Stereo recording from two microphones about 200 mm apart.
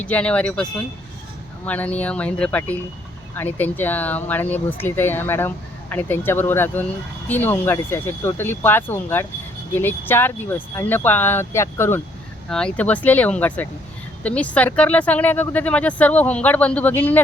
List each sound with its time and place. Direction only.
0.0 s speech: 5° left (ahead or behind)